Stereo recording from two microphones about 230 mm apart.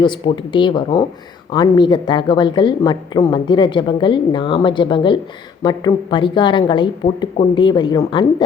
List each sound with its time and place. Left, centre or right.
0.0 s a woman's voice: left